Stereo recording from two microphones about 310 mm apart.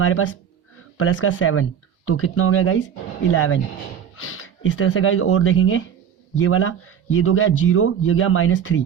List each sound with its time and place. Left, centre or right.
0.0 s speech: left